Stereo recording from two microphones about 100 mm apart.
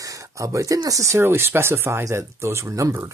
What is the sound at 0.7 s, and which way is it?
Speech, 35° right (ahead or behind).